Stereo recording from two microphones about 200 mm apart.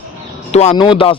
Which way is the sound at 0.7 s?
25° left (ahead or behind).